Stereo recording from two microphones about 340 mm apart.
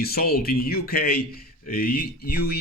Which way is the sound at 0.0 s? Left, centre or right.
Left.